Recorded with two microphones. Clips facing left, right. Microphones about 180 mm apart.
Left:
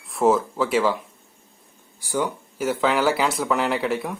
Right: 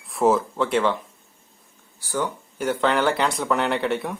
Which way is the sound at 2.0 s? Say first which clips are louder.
Left 2 dB; 10° left (ahead or behind).